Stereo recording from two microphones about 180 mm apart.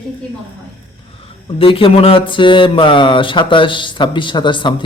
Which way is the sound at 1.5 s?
30° left (ahead or behind).